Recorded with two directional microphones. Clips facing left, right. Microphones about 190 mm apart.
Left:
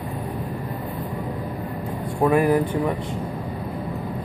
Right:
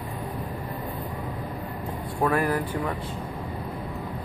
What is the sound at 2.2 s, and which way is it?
Speech, 15° left (ahead or behind).